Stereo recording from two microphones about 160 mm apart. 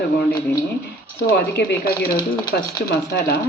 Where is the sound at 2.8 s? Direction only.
90° left.